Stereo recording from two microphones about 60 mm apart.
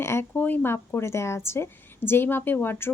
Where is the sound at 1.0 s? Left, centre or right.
Left.